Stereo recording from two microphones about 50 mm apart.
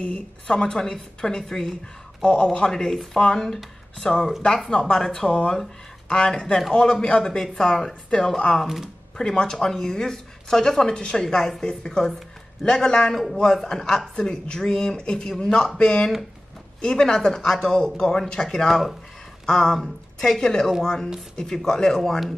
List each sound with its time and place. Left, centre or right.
0.5 s speech: centre
2.2 s speech: centre
8.6 s speech: centre
9.2 s speech: centre
11.2 s speech: centre